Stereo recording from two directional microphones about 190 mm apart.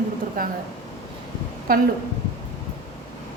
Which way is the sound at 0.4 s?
50° right (ahead or behind).